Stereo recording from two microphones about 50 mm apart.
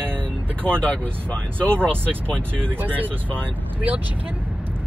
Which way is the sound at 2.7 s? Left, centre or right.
Right.